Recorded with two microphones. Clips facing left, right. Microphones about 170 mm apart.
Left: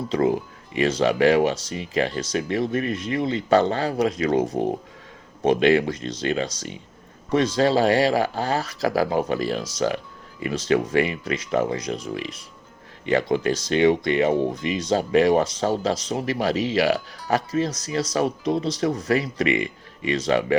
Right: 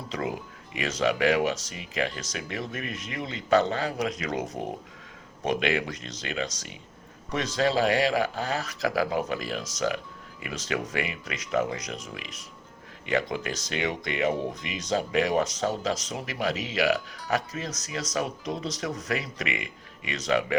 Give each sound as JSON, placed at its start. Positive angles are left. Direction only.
{"t": 0.1, "sound": "speech", "side_deg": 30}